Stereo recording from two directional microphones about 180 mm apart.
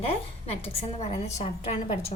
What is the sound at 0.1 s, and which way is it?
A woman's voice, 35° left (ahead or behind).